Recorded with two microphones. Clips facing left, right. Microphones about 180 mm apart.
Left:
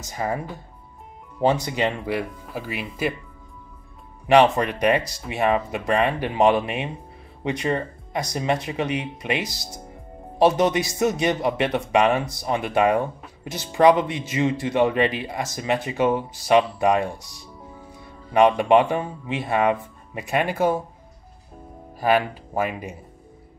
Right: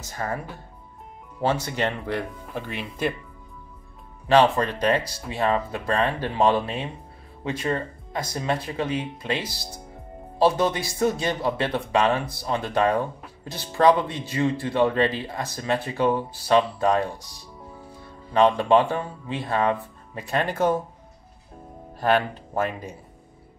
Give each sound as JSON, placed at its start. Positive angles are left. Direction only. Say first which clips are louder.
{"t": 0.0, "sound": "speech", "louder": "left 3 dB", "side_deg": 15}
{"t": 4.3, "sound": "speech", "louder": "left 2 dB", "side_deg": 15}
{"t": 10.6, "sound": "speech", "louder": "left 2 dB", "side_deg": 20}
{"t": 22.0, "sound": "speech", "louder": "left 1 dB", "side_deg": 10}